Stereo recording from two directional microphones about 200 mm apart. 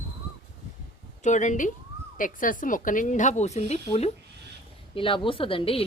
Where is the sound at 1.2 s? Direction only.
35° left (ahead or behind).